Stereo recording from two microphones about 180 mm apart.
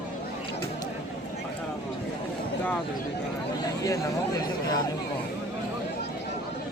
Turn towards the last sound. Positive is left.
turn(degrees=20)  # may be behind; listen again after turning